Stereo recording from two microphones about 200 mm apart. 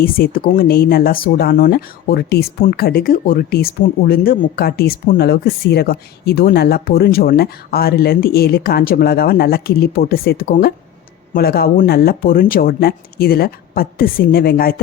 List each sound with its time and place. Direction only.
0.0 s speech: 45° left (ahead or behind)